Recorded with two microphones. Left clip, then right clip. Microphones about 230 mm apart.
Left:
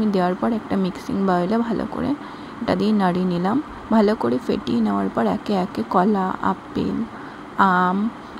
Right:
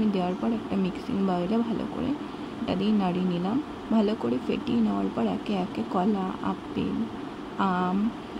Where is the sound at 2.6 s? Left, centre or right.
Left.